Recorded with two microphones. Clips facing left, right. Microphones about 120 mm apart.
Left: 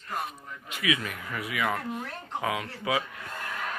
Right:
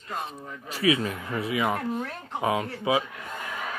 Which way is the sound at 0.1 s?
30° right (ahead or behind).